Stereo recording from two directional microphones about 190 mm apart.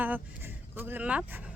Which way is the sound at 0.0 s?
10° right (ahead or behind).